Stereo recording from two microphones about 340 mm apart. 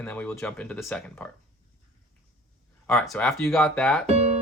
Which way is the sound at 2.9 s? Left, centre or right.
Centre.